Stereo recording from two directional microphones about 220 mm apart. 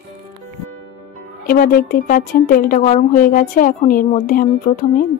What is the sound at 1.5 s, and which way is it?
A woman's voice, 40° left (ahead or behind).